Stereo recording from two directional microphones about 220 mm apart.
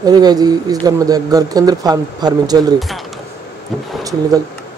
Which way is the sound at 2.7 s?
Centre (ahead or behind).